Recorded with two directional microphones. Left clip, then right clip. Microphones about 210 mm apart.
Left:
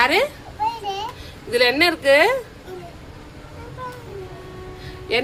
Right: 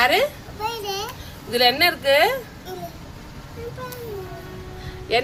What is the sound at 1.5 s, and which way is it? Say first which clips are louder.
Speech: left 1 dB; 15° left (ahead or behind).